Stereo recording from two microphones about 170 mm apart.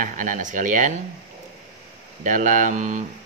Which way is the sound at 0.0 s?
50° right (ahead or behind).